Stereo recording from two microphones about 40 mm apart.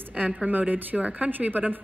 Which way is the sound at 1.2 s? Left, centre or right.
Right.